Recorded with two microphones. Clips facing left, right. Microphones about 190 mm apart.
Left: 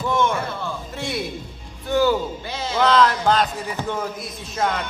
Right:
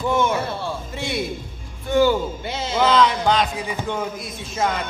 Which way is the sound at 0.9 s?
Centre (ahead or behind).